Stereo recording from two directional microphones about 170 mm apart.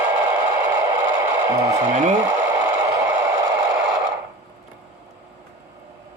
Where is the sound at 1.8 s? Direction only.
45° right (ahead or behind).